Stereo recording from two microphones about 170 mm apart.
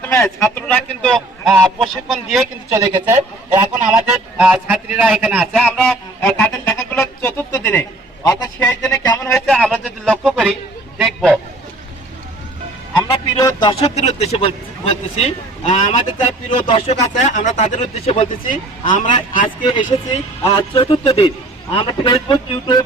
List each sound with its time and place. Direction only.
0.0 s speech: 15° left (ahead or behind)
2.6 s a man's voice: 15° right (ahead or behind)
5.6 s a sound: centre (ahead or behind)
8.6 s music: 5° left (ahead or behind)
9.3 s speech: centre (ahead or behind)
10.9 s a sound: 5° right (ahead or behind)
13.0 s music: 20° left (ahead or behind)
13.8 s speech: 40° left (ahead or behind)
18.9 s a man's voice: 50° left (ahead or behind)
20.4 s speech: 30° left (ahead or behind)